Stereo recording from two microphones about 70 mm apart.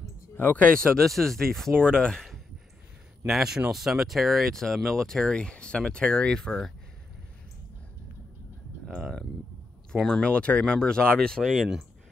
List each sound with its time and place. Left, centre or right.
0.4 s speech: left
0.9 s speech: centre
3.3 s speech: centre
9.9 s speech: centre